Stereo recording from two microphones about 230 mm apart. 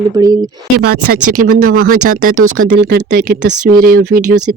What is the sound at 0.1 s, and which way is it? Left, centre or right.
Speech, centre.